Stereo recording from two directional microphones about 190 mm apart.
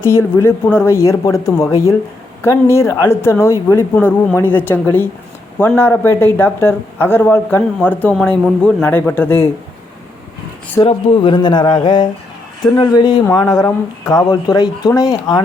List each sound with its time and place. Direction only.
0.0 s a woman's voice: 15° left (ahead or behind)
10.8 s a man's voice: 25° left (ahead or behind)